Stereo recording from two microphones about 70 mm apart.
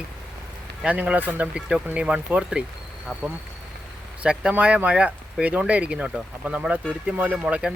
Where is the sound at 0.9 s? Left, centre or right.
Centre.